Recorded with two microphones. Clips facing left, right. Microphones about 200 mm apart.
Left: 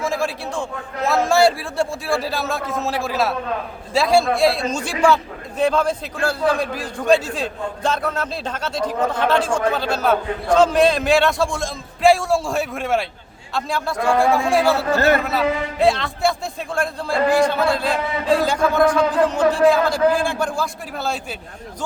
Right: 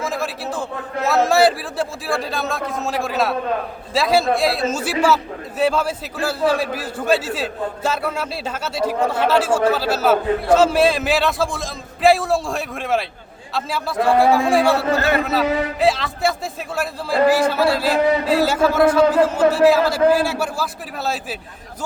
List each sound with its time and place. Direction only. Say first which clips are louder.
0.0 s a man's voice: left 2 dB; centre (ahead or behind)